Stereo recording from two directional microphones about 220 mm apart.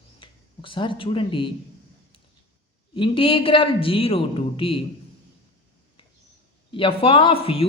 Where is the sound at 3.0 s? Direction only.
25° left (ahead or behind).